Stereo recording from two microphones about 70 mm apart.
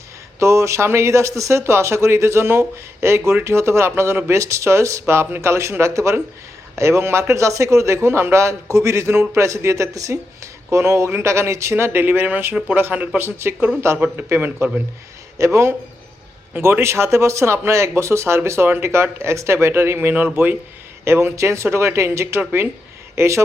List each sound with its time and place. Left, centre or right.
0.3 s speech: right
21.0 s speech: right